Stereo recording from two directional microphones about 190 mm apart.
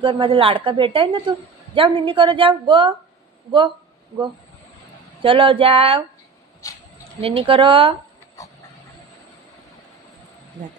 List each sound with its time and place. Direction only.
0.0 s a woman's voice: 25° right (ahead or behind)
5.2 s a woman's voice: 25° right (ahead or behind)
7.2 s a woman's voice: 30° right (ahead or behind)